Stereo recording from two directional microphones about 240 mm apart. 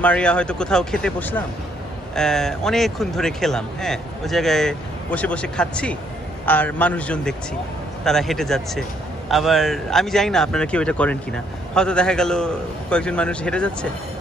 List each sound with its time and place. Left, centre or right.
0.0 s speech: centre